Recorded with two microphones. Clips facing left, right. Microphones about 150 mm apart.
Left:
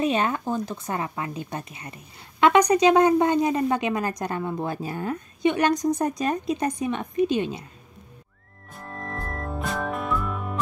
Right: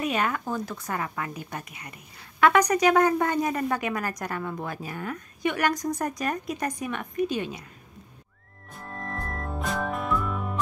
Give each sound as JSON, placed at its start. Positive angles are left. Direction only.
{"t": 0.0, "sound": "a woman's voice", "side_deg": 25}
{"t": 8.6, "sound": "music", "side_deg": 0}